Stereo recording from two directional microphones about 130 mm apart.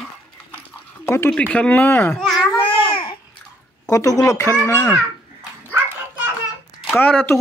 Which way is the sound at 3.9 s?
25° left (ahead or behind).